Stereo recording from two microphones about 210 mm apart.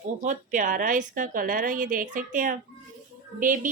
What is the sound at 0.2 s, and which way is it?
Speech, 40° right (ahead or behind).